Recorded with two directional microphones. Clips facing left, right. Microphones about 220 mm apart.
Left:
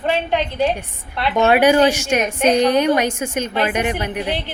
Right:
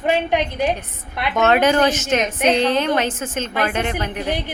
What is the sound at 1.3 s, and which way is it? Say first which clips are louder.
Speech: left 2 dB; 15° left (ahead or behind).